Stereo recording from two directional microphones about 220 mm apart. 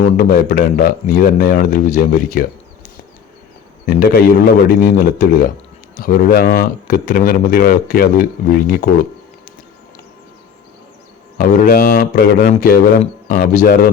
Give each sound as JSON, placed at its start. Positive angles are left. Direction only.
{"t": 0.0, "sound": "speech", "side_deg": 40}
{"t": 3.8, "sound": "a man's voice", "side_deg": 40}
{"t": 11.3, "sound": "speech", "side_deg": 40}